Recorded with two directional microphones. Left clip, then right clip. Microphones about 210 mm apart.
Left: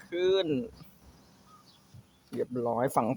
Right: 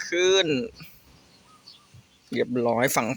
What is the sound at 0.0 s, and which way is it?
Speech, centre (ahead or behind).